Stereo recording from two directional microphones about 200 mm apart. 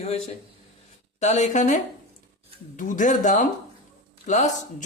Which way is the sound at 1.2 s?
35° left (ahead or behind).